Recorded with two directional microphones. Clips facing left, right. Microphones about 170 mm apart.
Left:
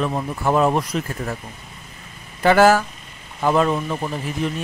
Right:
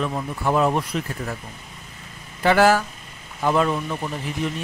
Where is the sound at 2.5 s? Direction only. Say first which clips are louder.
Left 3 dB; 45° left (ahead or behind).